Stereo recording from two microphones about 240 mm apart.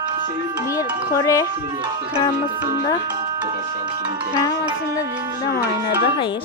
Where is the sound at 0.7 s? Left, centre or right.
Centre.